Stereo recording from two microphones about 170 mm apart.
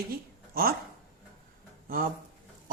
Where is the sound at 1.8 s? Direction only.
60° right (ahead or behind).